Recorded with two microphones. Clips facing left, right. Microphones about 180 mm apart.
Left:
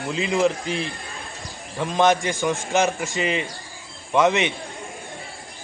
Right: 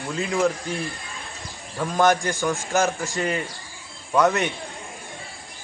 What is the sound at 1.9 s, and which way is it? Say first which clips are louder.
Speech: left 1 dB; 20° left (ahead or behind).